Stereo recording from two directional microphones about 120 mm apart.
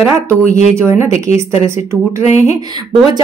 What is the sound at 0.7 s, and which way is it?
A woman's voice, 20° right (ahead or behind).